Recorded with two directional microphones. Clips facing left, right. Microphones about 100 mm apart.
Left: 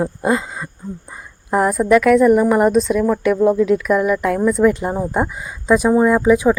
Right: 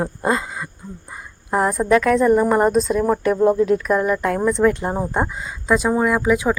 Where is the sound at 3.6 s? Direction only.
35° right (ahead or behind).